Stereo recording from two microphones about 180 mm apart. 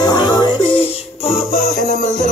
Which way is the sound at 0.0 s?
20° left (ahead or behind).